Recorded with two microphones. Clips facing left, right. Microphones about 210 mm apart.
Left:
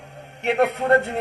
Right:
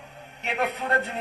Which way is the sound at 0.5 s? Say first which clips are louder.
Left 8 dB; 70° left (ahead or behind).